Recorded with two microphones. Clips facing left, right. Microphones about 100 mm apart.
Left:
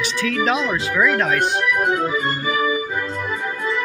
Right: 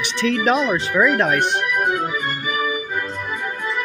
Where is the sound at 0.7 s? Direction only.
20° right (ahead or behind).